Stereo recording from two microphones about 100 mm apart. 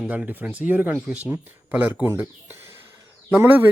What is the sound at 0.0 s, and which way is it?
A man's voice, 10° right (ahead or behind).